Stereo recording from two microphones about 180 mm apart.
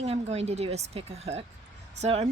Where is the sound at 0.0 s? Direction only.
35° right (ahead or behind).